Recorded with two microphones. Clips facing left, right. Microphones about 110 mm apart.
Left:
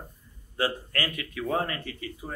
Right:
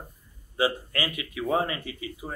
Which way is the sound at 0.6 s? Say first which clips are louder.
Right 2 dB; 10° right (ahead or behind).